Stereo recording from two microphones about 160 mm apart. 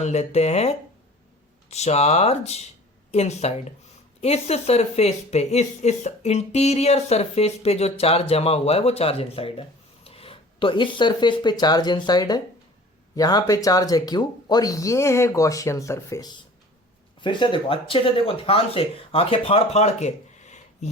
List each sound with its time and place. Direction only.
0.0 s speech: 45° left (ahead or behind)